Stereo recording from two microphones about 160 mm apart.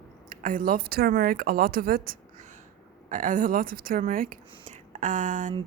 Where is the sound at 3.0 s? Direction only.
55° right (ahead or behind).